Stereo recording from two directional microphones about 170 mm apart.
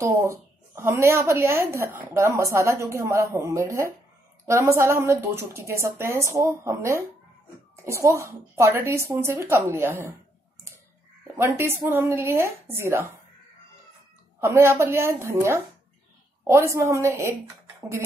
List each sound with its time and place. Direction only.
0.0 s speech: 15° right (ahead or behind)
11.3 s speech: 15° right (ahead or behind)
14.4 s speech: 15° right (ahead or behind)